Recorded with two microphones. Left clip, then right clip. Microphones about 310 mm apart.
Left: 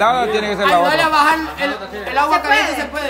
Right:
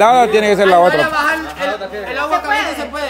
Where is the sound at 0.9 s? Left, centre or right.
Left.